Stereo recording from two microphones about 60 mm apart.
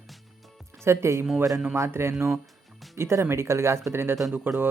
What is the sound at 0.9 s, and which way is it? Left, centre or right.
Speech, right.